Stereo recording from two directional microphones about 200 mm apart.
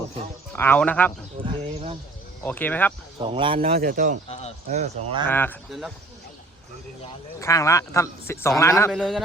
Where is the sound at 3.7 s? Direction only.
45° right (ahead or behind).